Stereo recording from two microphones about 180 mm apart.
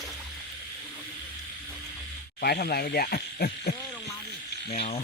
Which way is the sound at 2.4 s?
60° left (ahead or behind).